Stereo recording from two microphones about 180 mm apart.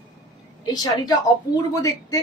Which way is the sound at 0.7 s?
20° left (ahead or behind).